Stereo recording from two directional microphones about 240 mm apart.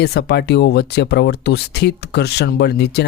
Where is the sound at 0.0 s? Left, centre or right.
Left.